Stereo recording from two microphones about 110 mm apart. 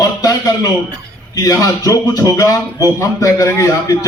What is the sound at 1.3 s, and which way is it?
Speech, 35° left (ahead or behind).